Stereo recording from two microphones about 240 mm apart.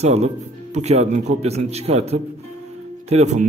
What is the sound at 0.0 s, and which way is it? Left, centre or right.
Speech, right.